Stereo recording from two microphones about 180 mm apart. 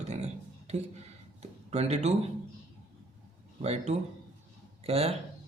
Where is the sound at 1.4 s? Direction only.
35° right (ahead or behind).